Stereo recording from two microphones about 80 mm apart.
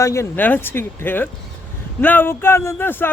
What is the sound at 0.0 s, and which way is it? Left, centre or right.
Speech, left.